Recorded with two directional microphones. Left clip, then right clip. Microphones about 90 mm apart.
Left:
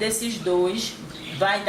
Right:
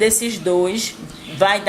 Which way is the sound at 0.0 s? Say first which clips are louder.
Right 8 dB; 35° right (ahead or behind).